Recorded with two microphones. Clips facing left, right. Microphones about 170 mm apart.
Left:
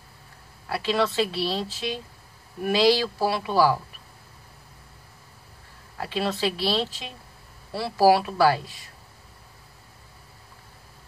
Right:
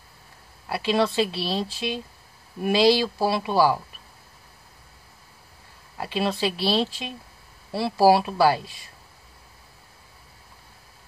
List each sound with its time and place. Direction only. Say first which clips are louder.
0.7 s speech: right 2 dB; 15° right (ahead or behind)
5.9 s speech: right 1 dB; 15° right (ahead or behind)